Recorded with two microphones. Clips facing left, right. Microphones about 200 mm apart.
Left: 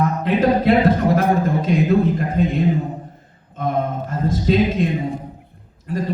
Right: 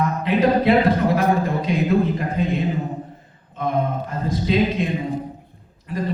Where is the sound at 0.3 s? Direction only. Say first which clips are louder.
Left 1 dB; 45° left (ahead or behind).